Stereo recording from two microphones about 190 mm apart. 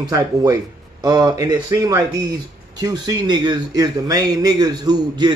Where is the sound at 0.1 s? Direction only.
20° right (ahead or behind).